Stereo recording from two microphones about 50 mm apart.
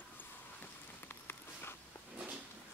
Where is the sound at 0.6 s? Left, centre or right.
Left.